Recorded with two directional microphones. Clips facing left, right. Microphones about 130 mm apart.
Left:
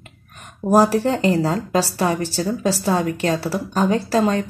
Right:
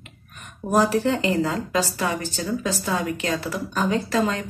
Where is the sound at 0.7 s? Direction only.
40° left (ahead or behind).